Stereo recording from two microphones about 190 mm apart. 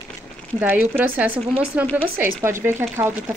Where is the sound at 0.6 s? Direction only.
10° right (ahead or behind).